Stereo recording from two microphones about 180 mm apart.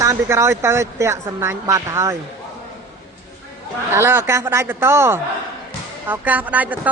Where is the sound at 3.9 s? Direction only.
10° right (ahead or behind).